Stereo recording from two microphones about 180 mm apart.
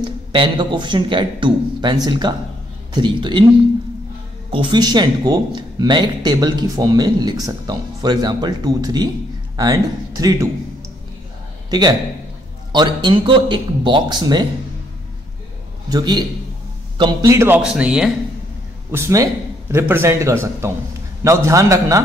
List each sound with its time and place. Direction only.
0.0 s speech: 25° right (ahead or behind)
4.5 s speech: 25° right (ahead or behind)
11.7 s speech: 20° right (ahead or behind)
15.9 s a man's voice: 25° right (ahead or behind)